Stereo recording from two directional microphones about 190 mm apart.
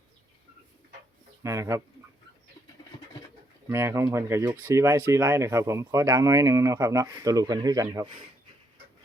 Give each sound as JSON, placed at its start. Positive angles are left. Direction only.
{"t": 1.5, "sound": "speech", "side_deg": -15}
{"t": 3.7, "sound": "speech", "side_deg": -15}